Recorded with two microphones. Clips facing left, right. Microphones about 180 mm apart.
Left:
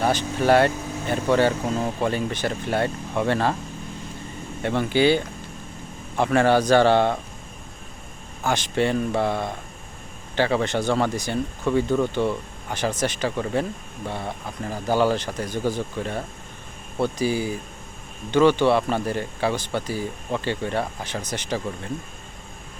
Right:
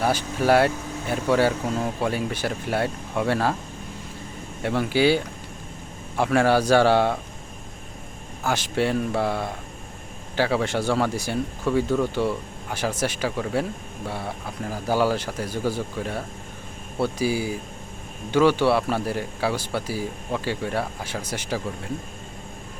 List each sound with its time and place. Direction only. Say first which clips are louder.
0.0 s speech: left 1 dB; 10° right (ahead or behind)
4.6 s speech: left 1 dB; 5° right (ahead or behind)
8.4 s speech: left 1 dB; 5° right (ahead or behind)